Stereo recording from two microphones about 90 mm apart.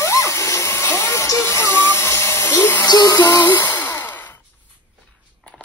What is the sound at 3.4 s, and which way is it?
Sigh, 25° left (ahead or behind).